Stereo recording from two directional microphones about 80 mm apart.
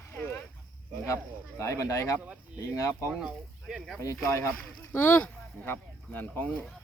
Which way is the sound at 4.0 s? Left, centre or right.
Left.